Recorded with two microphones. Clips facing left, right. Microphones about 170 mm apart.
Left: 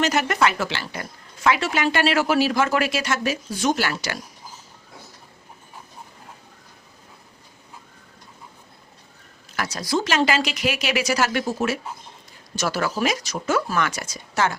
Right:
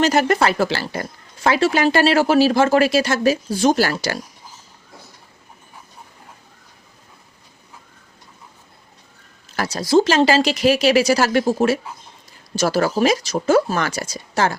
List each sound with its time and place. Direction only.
0.0 s speech: 35° right (ahead or behind)
9.6 s speech: 30° right (ahead or behind)